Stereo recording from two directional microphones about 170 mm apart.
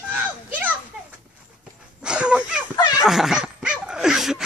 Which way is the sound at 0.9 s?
Centre (ahead or behind).